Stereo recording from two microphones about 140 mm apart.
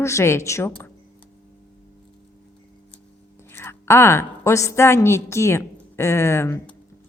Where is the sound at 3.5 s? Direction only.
15° left (ahead or behind).